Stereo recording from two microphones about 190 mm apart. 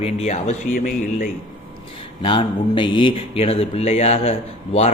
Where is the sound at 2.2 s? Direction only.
25° left (ahead or behind).